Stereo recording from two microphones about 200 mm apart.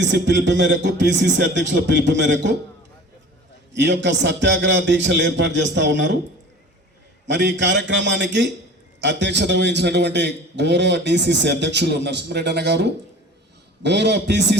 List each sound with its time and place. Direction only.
0.0 s a man's voice: 60° right (ahead or behind)
3.7 s a man's voice: 60° right (ahead or behind)
7.3 s a man's voice: 60° right (ahead or behind)